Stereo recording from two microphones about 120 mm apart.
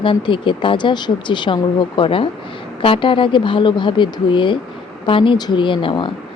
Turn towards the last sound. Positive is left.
turn(degrees=45)  # may be behind; listen again after turning